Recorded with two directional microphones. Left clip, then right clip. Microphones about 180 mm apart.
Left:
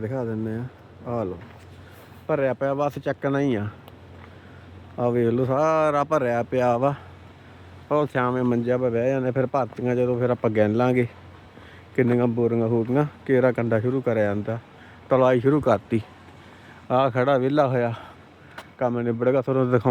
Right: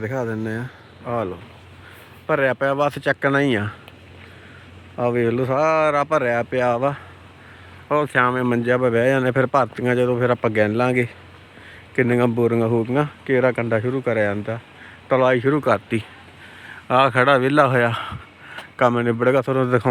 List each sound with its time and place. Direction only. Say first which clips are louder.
0.1 s speech: right 4 dB; 5° left (ahead or behind)
0.4 s speech: right 4 dB; 10° right (ahead or behind)
2.2 s speech: right 4 dB; centre (ahead or behind)
4.9 s speech: right 2 dB; 5° left (ahead or behind); by 10.4 s 10° right (ahead or behind)
10.4 s speech: right 2 dB; 10° left (ahead or behind)
12.3 s speech: right 3 dB; 10° right (ahead or behind)
12.9 s speech: right 2 dB; 10° left (ahead or behind); by 19.1 s 15° right (ahead or behind)
19.2 s speech: right 2 dB; centre (ahead or behind)